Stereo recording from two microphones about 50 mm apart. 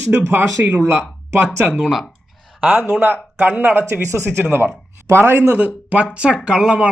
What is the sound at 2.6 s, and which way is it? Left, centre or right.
Speech, right.